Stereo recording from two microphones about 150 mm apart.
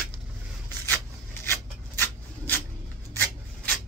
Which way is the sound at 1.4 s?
15° left (ahead or behind).